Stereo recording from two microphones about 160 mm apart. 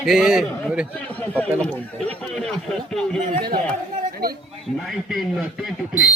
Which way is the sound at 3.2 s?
60° right (ahead or behind).